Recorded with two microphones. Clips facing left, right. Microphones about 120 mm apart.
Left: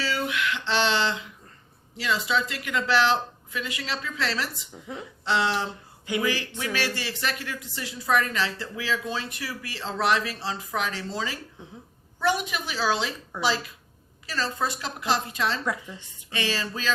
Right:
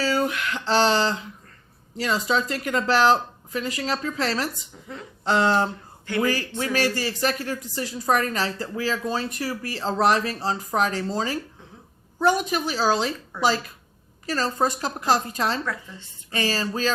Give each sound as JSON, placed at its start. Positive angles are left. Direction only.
{"t": 0.0, "sound": "a sound", "side_deg": -40}
{"t": 2.0, "sound": "speech", "side_deg": -40}
{"t": 15.6, "sound": "speech", "side_deg": 15}
{"t": 16.3, "sound": "speech", "side_deg": -40}